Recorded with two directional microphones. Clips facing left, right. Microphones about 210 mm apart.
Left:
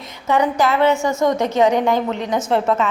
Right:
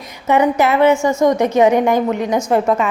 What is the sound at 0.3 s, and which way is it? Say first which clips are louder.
A woman's voice: right 3 dB; 20° right (ahead or behind).